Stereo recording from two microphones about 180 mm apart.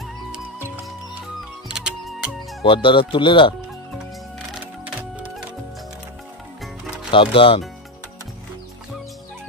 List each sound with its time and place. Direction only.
1.7 s music: 5° right (ahead or behind)
2.6 s speech: 30° left (ahead or behind)
7.1 s speech: 30° left (ahead or behind)